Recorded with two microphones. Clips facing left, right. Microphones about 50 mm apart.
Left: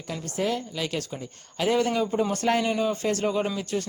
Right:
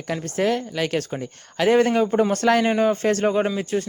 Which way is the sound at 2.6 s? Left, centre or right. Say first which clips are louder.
Right 6 dB; right.